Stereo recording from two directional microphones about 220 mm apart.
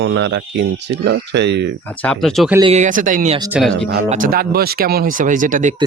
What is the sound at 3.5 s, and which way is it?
Speech, centre (ahead or behind).